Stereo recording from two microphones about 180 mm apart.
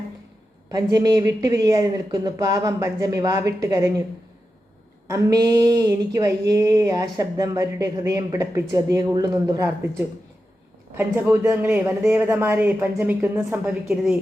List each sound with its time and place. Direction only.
0.7 s speech: 20° right (ahead or behind)
5.0 s speech: 20° right (ahead or behind)